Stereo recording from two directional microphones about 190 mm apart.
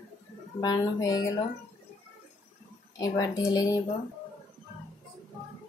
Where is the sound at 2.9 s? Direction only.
15° left (ahead or behind).